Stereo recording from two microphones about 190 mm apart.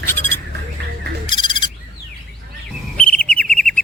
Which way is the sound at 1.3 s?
25° left (ahead or behind).